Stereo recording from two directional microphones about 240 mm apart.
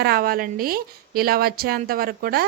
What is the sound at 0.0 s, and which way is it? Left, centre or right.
A woman's voice, right.